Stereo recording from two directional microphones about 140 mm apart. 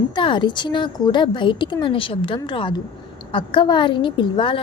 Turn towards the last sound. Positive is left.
turn(degrees=35)  # may be behind; listen again after turning